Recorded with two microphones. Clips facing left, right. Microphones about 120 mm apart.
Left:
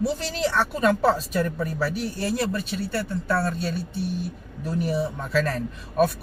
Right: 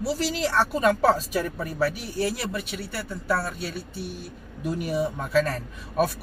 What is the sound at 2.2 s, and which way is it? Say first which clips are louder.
Speech: even; 25° left (ahead or behind).